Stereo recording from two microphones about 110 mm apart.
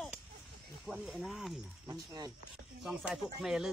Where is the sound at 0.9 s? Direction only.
Centre (ahead or behind).